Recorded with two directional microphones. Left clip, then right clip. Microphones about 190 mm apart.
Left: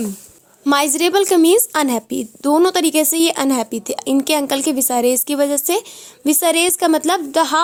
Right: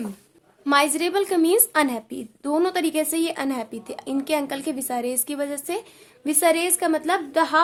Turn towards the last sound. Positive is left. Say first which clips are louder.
# left 4 dB
turn(degrees=40)  # may be behind; listen again after turning